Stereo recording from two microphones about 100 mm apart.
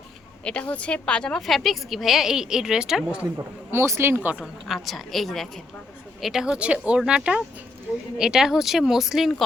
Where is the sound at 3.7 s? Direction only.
25° right (ahead or behind).